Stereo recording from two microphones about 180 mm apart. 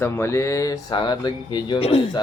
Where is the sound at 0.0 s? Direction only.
15° left (ahead or behind).